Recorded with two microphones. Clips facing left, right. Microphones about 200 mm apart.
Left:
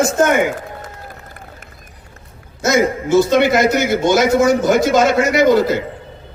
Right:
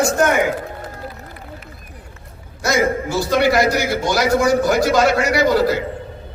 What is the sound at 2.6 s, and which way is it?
A man's voice, 20° left (ahead or behind).